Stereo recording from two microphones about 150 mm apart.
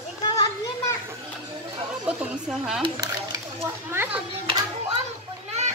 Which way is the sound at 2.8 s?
25° right (ahead or behind).